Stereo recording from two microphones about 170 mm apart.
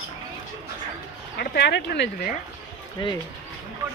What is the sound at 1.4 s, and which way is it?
Speech, 80° left.